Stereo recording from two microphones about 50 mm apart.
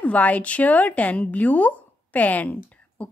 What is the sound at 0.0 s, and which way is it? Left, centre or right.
A woman's voice, left.